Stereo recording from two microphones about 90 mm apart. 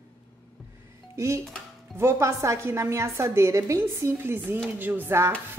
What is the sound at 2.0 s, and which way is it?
A woman's voice, 30° right (ahead or behind).